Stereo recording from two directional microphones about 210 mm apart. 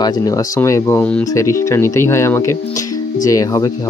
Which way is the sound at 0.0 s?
15° left (ahead or behind).